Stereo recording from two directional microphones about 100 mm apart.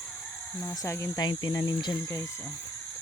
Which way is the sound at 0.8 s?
25° left (ahead or behind).